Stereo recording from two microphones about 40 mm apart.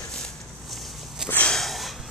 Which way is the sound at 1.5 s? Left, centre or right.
Centre.